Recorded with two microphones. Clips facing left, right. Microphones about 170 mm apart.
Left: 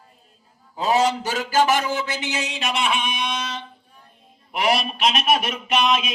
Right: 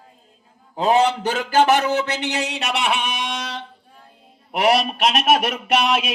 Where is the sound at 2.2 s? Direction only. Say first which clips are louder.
Right 3 dB; 65° right (ahead or behind).